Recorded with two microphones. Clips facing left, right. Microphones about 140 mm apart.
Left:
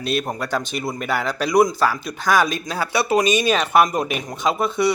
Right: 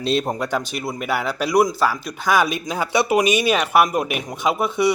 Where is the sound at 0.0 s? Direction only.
25° right (ahead or behind).